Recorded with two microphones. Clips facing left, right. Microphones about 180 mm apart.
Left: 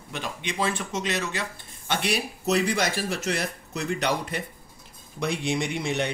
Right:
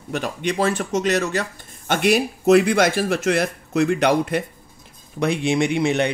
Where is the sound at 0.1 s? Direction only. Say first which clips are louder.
Right 9 dB; 45° right (ahead or behind).